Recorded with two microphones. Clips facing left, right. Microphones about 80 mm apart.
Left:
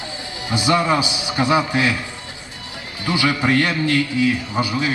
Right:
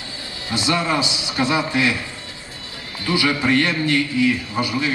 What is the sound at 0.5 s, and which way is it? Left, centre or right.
A man's voice, centre.